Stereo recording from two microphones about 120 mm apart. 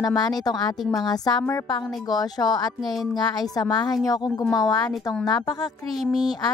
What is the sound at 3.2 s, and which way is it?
Speech, 35° left (ahead or behind).